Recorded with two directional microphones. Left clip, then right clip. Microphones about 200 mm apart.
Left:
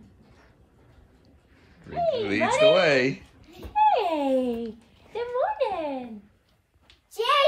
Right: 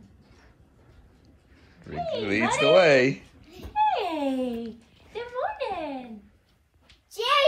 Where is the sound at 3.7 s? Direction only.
50° left (ahead or behind).